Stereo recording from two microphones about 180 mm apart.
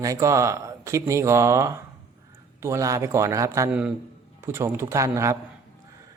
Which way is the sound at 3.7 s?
5° right (ahead or behind).